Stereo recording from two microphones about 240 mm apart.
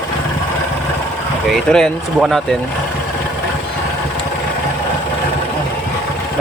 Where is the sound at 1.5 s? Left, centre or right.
Centre.